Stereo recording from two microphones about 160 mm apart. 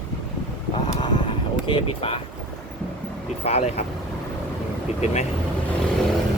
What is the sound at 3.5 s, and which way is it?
Speech, 40° left (ahead or behind).